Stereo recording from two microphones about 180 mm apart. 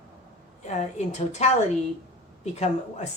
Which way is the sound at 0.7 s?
40° left (ahead or behind).